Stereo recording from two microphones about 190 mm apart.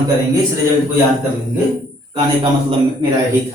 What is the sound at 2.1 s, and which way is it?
Speech, 30° right (ahead or behind).